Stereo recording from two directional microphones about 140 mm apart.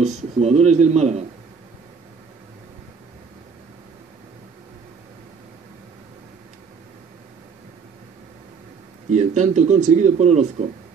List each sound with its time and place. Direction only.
0.0 s speech: 50° right (ahead or behind)
9.1 s a man's voice: 55° right (ahead or behind)